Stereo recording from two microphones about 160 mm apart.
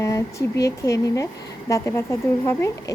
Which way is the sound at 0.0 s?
20° left (ahead or behind).